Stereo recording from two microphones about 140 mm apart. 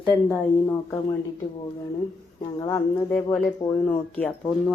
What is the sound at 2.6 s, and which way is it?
Speech, 25° left (ahead or behind).